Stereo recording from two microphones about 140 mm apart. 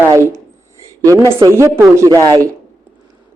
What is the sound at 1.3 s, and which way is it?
A man's voice, 20° right (ahead or behind).